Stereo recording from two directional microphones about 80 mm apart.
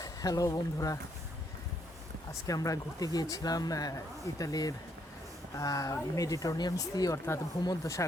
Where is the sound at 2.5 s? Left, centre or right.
Left.